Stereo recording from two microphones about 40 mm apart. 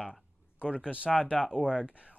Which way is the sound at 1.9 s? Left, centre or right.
Right.